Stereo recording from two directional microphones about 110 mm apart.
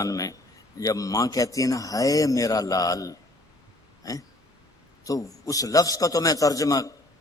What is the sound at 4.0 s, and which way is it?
Hiccup, 35° left (ahead or behind).